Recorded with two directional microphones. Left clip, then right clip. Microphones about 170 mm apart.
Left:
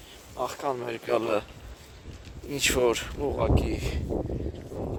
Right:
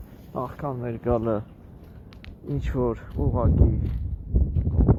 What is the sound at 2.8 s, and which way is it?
Speech, 70° left (ahead or behind).